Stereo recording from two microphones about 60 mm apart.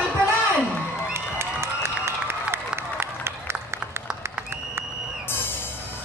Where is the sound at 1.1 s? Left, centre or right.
Right.